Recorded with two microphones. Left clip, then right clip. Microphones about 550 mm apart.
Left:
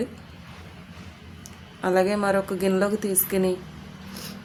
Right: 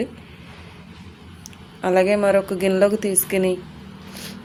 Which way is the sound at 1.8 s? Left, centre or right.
Left.